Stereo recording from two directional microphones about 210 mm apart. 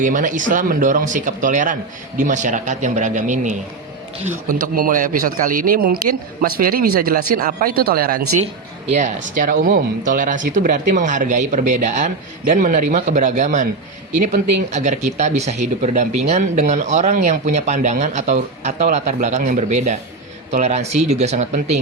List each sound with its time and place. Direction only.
0.0 s speech: 40° right (ahead or behind)
14.7 s speech: 35° right (ahead or behind)